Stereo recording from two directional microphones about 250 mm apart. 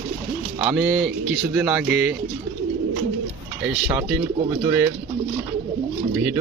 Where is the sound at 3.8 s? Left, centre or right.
Centre.